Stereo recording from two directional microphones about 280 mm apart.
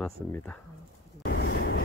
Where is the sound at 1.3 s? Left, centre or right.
Left.